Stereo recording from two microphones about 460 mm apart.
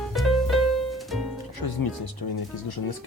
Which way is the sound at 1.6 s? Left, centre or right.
Left.